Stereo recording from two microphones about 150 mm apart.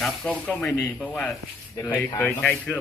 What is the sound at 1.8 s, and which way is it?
Speech, 20° left (ahead or behind).